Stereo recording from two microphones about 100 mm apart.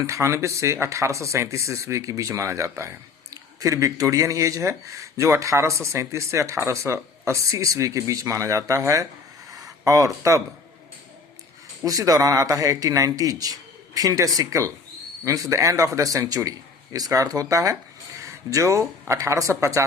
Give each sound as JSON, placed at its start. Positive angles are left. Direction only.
{"t": 0.0, "sound": "speech", "side_deg": -30}
{"t": 9.5, "sound": "a sound", "side_deg": -35}
{"t": 11.9, "sound": "speech", "side_deg": -35}